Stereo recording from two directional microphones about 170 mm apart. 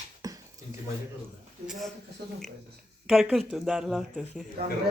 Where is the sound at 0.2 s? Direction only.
20° right (ahead or behind).